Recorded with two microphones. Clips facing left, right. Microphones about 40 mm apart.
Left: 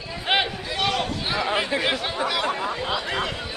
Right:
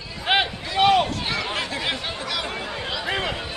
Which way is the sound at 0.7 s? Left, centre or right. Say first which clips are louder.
Right 8 dB; right.